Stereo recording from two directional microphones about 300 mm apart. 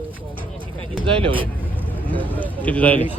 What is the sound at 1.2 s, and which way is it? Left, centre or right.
Speech, centre.